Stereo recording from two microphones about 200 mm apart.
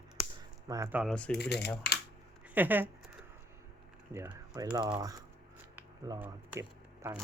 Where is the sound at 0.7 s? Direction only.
10° right (ahead or behind).